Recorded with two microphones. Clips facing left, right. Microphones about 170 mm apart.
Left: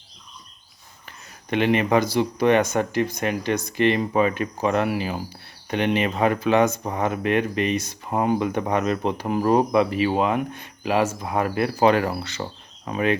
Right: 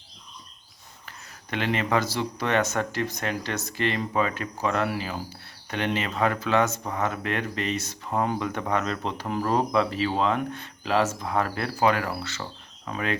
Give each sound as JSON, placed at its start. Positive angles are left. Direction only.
{"t": 1.5, "sound": "speech", "side_deg": 20}
{"t": 11.9, "sound": "speech", "side_deg": 25}